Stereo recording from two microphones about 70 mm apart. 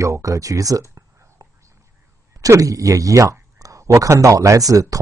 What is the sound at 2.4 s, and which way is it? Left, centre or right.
Speech, right.